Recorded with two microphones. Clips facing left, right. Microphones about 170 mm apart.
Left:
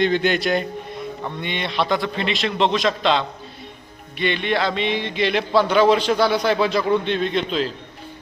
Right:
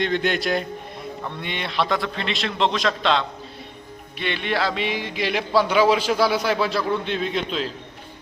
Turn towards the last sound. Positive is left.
turn(degrees=0)  # may be behind; listen again after turning